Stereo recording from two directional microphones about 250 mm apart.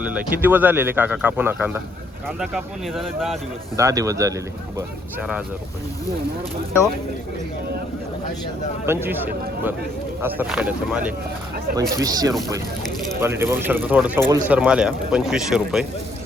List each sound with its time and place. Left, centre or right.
0.0 s speech: centre
3.8 s speech: centre
8.9 s speech: centre